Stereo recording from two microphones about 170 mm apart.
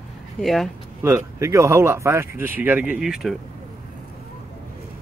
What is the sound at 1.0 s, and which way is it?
Speech, 15° right (ahead or behind).